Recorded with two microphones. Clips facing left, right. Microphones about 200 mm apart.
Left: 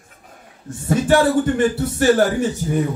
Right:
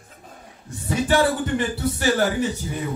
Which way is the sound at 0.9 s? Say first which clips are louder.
Left 4 dB; 50° left (ahead or behind).